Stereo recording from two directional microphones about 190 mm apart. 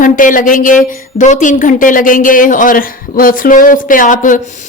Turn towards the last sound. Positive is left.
turn(degrees=45)  # may be behind; listen again after turning